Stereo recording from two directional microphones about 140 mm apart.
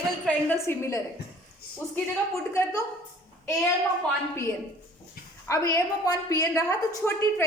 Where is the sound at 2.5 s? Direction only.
20° left (ahead or behind).